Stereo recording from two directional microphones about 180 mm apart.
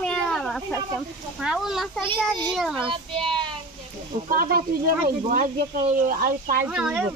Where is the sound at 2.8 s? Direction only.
25° right (ahead or behind).